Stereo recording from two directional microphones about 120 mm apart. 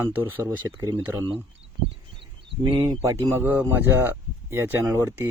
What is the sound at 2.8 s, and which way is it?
A man's voice, 30° right (ahead or behind).